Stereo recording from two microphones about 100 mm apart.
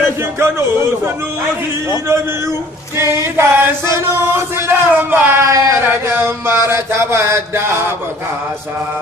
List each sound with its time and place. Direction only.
0.4 s chant: 25° right (ahead or behind)
3.0 s chant: 25° right (ahead or behind)